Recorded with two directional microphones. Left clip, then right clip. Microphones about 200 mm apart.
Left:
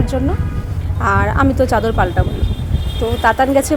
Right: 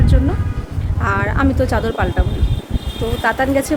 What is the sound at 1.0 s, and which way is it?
Speech, 15° left (ahead or behind).